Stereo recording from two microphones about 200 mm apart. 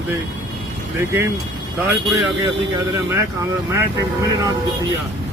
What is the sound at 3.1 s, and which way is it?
Speech, 15° right (ahead or behind).